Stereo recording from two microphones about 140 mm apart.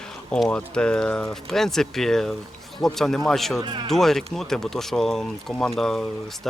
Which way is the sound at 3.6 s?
35° right (ahead or behind).